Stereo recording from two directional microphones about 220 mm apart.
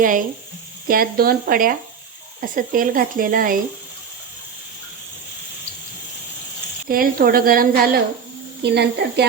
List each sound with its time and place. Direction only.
0.0 s speech: 40° right (ahead or behind)
6.8 s a woman's voice: 40° right (ahead or behind)